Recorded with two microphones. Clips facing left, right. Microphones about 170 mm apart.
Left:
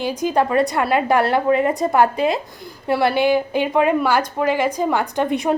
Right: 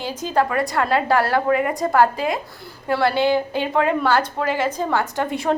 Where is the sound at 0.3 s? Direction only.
20° left (ahead or behind).